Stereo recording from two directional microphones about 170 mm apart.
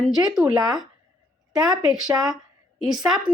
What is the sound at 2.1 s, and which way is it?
A woman's voice, centre (ahead or behind).